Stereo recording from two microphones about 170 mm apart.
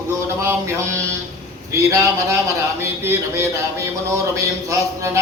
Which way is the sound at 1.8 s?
15° right (ahead or behind).